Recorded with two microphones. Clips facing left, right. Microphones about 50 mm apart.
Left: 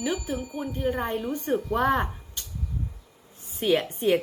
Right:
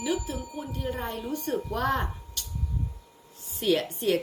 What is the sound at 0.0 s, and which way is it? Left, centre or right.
Speech, left.